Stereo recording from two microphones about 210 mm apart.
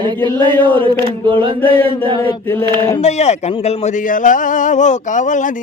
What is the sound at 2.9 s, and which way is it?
Speech, 30° left (ahead or behind).